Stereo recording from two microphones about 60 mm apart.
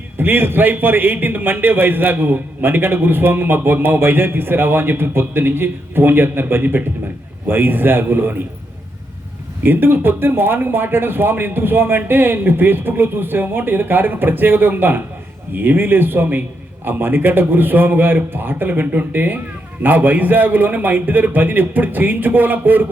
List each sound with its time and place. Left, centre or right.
0.2 s a man's voice: right
9.6 s a man's voice: right